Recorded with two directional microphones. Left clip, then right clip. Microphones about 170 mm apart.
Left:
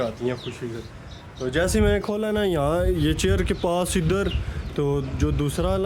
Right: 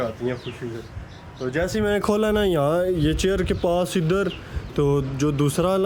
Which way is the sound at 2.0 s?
20° right (ahead or behind).